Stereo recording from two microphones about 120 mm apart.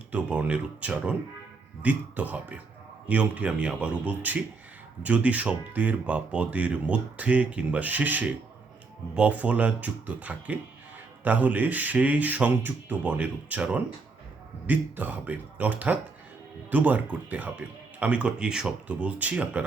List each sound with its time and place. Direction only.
0.1 s speech: 10° right (ahead or behind)